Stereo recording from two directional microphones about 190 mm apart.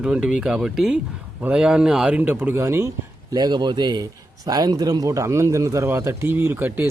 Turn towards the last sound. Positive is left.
turn(degrees=-10)  # may be behind; listen again after turning